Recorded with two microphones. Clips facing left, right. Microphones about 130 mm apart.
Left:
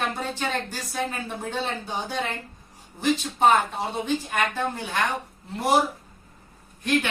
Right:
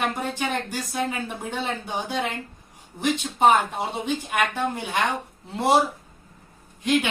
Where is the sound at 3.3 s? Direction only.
15° right (ahead or behind).